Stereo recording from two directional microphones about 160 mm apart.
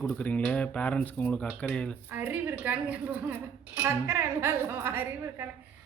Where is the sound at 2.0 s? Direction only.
10° right (ahead or behind).